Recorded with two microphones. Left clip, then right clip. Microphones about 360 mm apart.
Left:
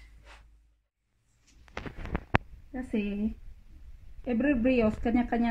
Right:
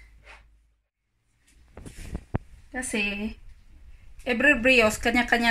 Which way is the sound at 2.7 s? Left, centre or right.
Right.